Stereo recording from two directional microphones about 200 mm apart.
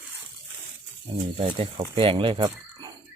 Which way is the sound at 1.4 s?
30° right (ahead or behind).